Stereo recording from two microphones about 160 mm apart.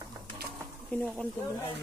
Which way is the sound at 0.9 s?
10° left (ahead or behind).